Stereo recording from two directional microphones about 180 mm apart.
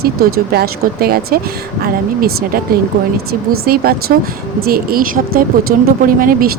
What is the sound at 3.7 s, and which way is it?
Speech, 55° right (ahead or behind).